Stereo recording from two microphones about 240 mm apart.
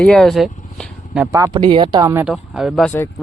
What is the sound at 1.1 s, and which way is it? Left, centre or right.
Speech, centre.